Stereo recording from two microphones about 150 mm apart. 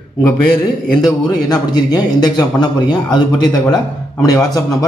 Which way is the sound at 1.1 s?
25° left (ahead or behind).